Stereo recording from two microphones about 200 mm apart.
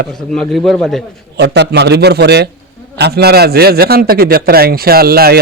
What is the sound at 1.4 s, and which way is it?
A man's voice, 55° right (ahead or behind).